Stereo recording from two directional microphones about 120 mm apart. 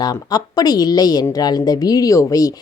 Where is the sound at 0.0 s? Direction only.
35° left (ahead or behind).